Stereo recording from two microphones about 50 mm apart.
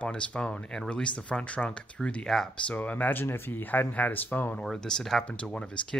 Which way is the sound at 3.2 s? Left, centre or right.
Left.